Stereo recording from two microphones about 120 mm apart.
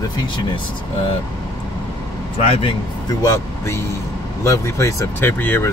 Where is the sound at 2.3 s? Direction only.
60° left (ahead or behind).